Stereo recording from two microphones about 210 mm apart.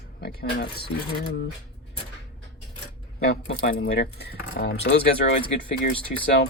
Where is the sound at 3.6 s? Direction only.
50° left (ahead or behind).